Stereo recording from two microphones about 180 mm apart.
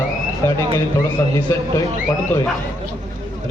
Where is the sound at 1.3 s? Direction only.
20° left (ahead or behind).